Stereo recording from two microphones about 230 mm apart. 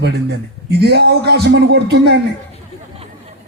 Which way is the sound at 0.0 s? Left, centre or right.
Right.